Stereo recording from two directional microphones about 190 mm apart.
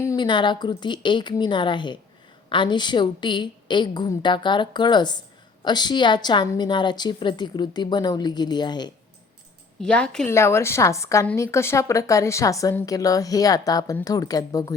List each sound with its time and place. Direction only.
0.0 s a woman's voice: 20° left (ahead or behind)
9.8 s a woman's voice: 5° left (ahead or behind)